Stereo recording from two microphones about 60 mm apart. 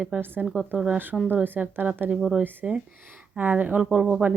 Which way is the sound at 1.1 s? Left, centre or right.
Centre.